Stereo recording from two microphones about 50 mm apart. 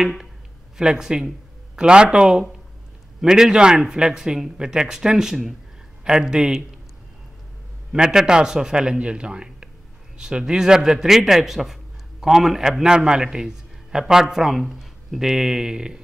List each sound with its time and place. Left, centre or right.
0.7 s a man's voice: centre
7.9 s a man's voice: centre